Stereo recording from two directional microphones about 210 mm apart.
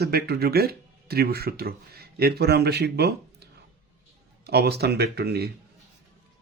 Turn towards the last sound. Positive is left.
turn(degrees=-50)  # may be behind; listen again after turning